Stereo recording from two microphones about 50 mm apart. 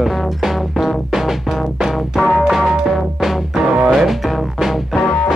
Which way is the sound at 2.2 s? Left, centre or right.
Centre.